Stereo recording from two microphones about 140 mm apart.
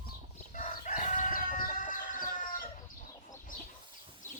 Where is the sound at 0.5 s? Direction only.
65° left (ahead or behind).